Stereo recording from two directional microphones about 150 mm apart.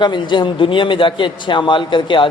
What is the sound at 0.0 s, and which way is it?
A man's voice, 30° left (ahead or behind).